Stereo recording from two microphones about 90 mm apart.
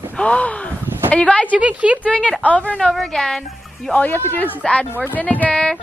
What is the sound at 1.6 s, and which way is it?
Speech, 15° right (ahead or behind).